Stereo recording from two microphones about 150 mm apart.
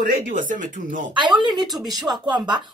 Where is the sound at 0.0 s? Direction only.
65° right (ahead or behind).